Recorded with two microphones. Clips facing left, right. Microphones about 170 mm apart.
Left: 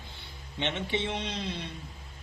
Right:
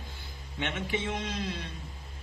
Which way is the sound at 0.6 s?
25° left (ahead or behind).